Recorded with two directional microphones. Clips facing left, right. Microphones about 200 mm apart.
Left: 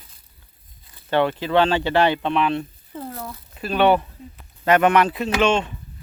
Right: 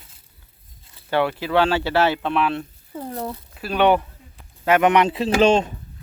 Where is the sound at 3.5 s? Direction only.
10° right (ahead or behind); by 5.3 s 25° right (ahead or behind).